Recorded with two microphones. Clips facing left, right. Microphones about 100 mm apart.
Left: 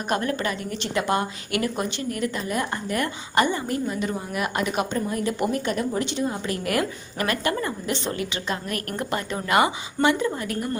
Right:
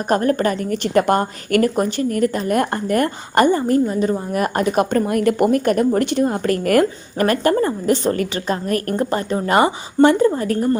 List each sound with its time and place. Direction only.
0.1 s speech: 40° right (ahead or behind)